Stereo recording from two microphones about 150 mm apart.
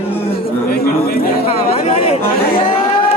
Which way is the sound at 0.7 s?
85° left.